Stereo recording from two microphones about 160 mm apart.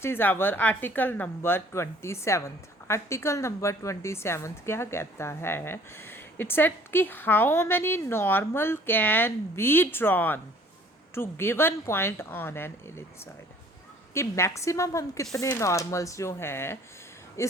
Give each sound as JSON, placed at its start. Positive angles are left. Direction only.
{"t": 0.0, "sound": "a woman's voice", "side_deg": 15}
{"t": 14.1, "sound": "speech", "side_deg": 15}